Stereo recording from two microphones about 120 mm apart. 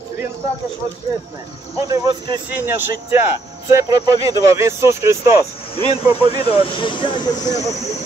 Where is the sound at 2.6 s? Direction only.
15° right (ahead or behind).